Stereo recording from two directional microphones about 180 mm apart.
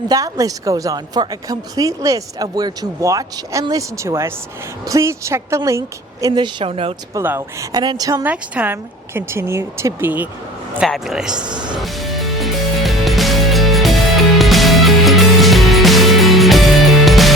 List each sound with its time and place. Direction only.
0.1 s a woman's voice: 20° right (ahead or behind)
7.1 s a woman's voice: 15° right (ahead or behind)
10.8 s speech: centre (ahead or behind)
11.8 s music: centre (ahead or behind)